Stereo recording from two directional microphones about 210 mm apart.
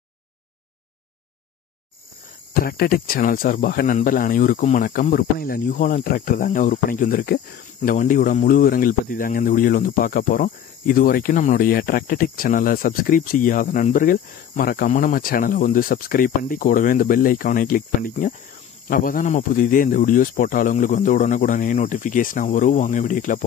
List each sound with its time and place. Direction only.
2.5 s speech: 45° left (ahead or behind)